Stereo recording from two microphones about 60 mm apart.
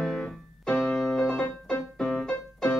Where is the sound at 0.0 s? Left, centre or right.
Centre.